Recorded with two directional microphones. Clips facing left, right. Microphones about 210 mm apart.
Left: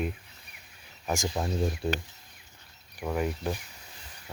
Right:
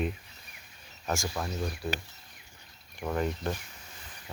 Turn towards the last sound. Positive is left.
turn(degrees=10)  # may be behind; listen again after turning